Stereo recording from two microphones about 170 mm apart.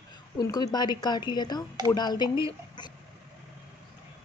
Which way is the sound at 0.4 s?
20° left (ahead or behind).